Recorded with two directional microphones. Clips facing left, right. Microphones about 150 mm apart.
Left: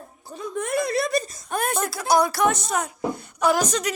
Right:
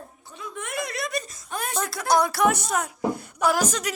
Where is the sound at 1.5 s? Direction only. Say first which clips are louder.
Left 2 dB; 55° left (ahead or behind).